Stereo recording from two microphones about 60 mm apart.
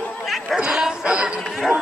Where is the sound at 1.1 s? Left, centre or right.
Centre.